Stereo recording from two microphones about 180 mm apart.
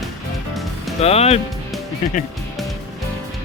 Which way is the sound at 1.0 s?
35° left (ahead or behind).